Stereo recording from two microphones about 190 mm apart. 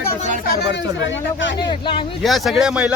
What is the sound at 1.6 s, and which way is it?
Speech, 25° left (ahead or behind).